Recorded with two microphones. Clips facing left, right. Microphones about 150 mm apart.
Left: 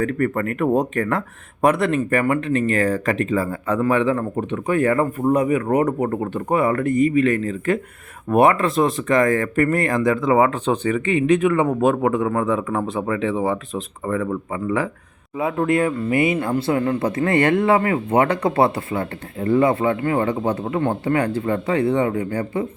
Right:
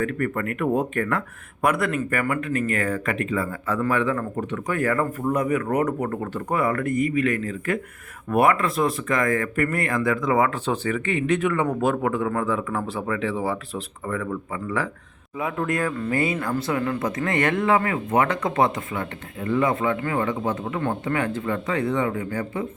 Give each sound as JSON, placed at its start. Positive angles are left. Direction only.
{"t": 0.0, "sound": "speech", "side_deg": 40}
{"t": 1.6, "sound": "speech", "side_deg": 30}
{"t": 3.8, "sound": "speech", "side_deg": 20}
{"t": 10.7, "sound": "speech", "side_deg": 15}